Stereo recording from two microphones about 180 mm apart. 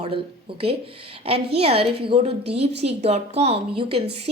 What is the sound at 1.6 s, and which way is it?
A woman's voice, 30° right (ahead or behind).